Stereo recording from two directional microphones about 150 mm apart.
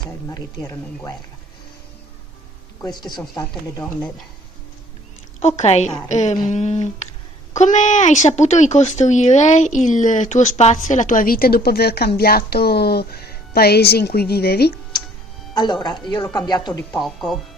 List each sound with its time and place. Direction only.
0.3 s speech: 20° left (ahead or behind)
2.8 s speech: 30° left (ahead or behind)
5.4 s speech: 50° left (ahead or behind); by 14.8 s 90° left
15.5 s speech: 30° left (ahead or behind)
16.9 s speech: centre (ahead or behind)